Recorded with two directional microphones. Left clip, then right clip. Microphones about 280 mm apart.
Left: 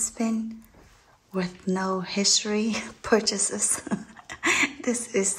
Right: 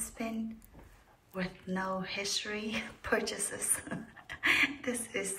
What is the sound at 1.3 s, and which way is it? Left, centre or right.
Speech, centre.